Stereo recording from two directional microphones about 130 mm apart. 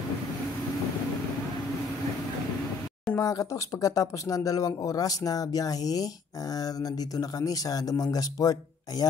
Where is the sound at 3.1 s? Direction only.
25° left (ahead or behind).